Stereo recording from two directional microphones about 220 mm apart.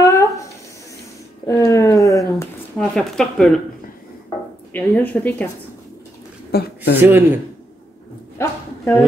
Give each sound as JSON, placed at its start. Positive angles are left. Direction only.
{"t": 0.0, "sound": "a sound", "side_deg": 15}
{"t": 2.9, "sound": "speech", "side_deg": 5}
{"t": 4.7, "sound": "a woman's voice", "side_deg": 5}
{"t": 6.5, "sound": "a woman's voice", "side_deg": 45}
{"t": 7.0, "sound": "speech", "side_deg": -10}
{"t": 8.4, "sound": "a sound", "side_deg": 10}